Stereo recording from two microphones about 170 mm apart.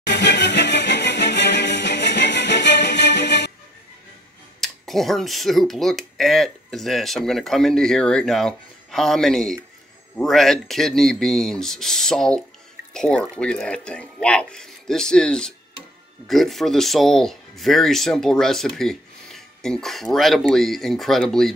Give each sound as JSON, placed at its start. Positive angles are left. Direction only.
{"t": 0.0, "sound": "music", "side_deg": 90}
{"t": 4.6, "sound": "speech", "side_deg": 0}